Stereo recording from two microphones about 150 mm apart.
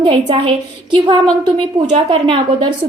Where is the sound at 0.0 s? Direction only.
35° right (ahead or behind).